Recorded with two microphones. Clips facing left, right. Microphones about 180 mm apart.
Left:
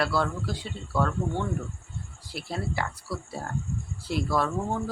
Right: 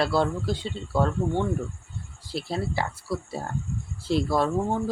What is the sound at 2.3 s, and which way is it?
Speech, 30° right (ahead or behind).